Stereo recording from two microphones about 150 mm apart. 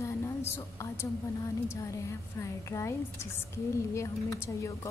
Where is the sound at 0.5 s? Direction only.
15° left (ahead or behind).